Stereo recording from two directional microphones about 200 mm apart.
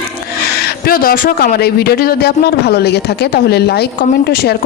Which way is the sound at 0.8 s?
50° left (ahead or behind).